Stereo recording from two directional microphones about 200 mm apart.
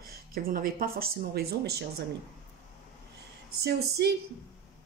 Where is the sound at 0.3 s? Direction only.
45° right (ahead or behind).